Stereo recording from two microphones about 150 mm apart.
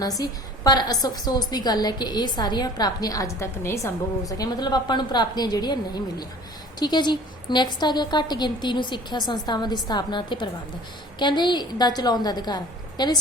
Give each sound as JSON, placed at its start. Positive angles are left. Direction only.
{"t": 0.0, "sound": "a woman's voice", "side_deg": 25}